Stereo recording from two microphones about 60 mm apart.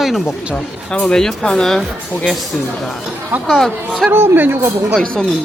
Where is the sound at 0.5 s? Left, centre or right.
Centre.